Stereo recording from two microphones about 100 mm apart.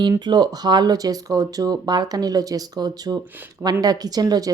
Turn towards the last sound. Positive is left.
turn(degrees=-40)  # may be behind; listen again after turning